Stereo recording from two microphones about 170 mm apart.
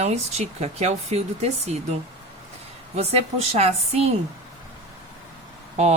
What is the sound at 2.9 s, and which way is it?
Speech, 40° right (ahead or behind).